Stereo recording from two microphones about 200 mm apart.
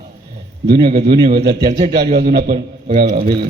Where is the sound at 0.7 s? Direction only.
50° right (ahead or behind).